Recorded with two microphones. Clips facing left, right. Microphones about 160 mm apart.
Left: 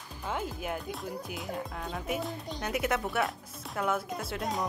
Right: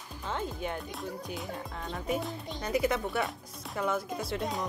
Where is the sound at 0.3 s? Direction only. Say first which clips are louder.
Even; 5° left (ahead or behind).